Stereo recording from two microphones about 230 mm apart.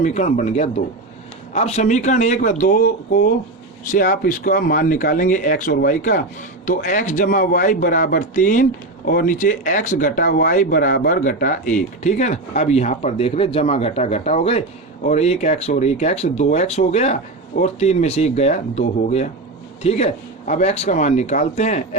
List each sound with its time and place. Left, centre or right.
0.0 s speech: left